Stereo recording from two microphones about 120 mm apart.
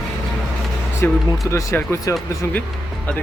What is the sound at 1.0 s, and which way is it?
Speech, 20° left (ahead or behind).